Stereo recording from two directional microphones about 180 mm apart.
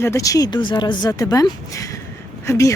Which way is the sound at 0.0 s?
15° left (ahead or behind).